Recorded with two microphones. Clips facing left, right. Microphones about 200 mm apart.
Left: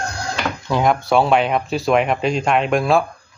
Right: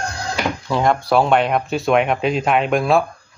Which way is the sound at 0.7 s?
Centre (ahead or behind).